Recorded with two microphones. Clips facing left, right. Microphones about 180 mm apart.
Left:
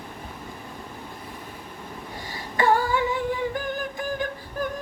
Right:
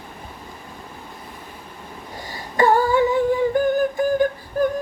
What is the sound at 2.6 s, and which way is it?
Humming, 45° right (ahead or behind).